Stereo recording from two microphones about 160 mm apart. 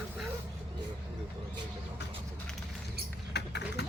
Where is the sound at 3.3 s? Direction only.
90° left.